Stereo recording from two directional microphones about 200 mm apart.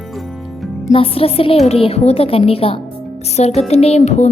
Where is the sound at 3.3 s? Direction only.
30° left (ahead or behind).